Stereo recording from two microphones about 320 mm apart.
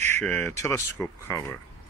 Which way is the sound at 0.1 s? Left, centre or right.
Centre.